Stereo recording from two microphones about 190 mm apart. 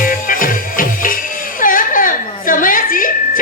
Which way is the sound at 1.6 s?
45° left (ahead or behind).